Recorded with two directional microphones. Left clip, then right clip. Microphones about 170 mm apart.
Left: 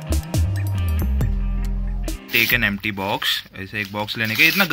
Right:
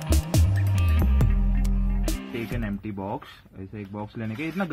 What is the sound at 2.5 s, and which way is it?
Speech, 15° left (ahead or behind).